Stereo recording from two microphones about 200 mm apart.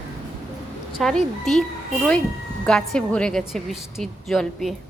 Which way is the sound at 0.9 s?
Centre (ahead or behind).